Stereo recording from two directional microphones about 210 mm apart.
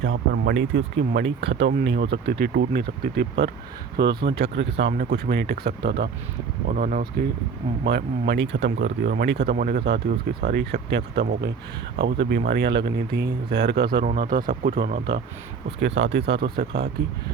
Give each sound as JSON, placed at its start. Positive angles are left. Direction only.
{"t": 0.0, "sound": "speech", "side_deg": -60}
{"t": 6.7, "sound": "speech", "side_deg": -40}
{"t": 7.9, "sound": "speech", "side_deg": -50}